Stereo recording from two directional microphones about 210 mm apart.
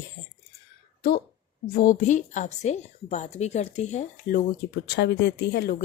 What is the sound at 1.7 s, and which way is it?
Speech, 40° left (ahead or behind).